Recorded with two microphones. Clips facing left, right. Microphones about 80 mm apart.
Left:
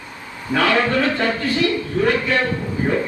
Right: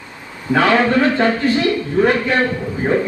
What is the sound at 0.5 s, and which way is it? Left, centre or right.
A man's voice, right.